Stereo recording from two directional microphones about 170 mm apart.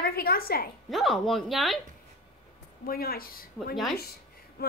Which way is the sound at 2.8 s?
60° left (ahead or behind).